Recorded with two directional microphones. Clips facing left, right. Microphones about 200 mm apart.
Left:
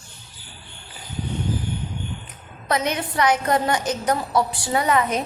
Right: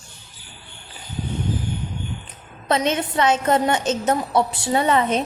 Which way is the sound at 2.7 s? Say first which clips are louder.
Right 3 dB; 25° right (ahead or behind).